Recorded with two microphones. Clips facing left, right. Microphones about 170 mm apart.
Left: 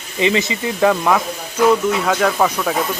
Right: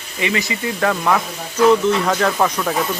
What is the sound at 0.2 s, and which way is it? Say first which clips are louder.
Speech: left 4 dB; 25° left (ahead or behind).